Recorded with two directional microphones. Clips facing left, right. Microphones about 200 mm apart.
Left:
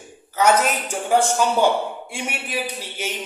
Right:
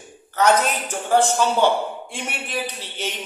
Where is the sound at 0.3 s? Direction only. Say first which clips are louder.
Even; 10° left (ahead or behind).